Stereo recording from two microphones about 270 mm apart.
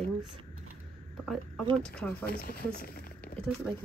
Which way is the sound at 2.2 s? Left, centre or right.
Left.